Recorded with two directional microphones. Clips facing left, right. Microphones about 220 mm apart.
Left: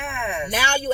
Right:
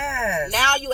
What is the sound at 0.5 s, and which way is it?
Speech, 10° left (ahead or behind).